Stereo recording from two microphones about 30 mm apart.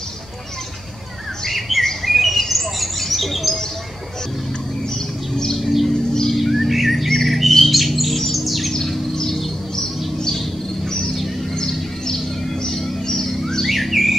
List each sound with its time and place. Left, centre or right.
1.7 s bird: centre
2.0 s chirp: centre
2.5 s bird: centre
5.3 s a sound: left
5.6 s a sound: centre
6.3 s bird: centre
7.1 s bird: centre
9.1 s bird: centre
11.5 s bird: left
12.6 s music: centre
13.0 s bird: centre
13.7 s bird: centre